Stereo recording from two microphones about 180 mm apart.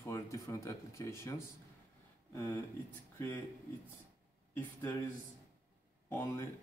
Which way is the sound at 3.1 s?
10° left (ahead or behind).